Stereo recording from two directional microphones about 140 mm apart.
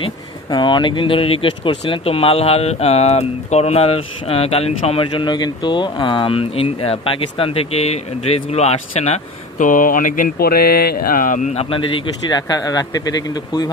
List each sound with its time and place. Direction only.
0.0 s speech: 35° left (ahead or behind)
5.2 s speech: 30° left (ahead or behind); by 11.5 s 70° left (ahead or behind)
12.3 s speech: 30° left (ahead or behind)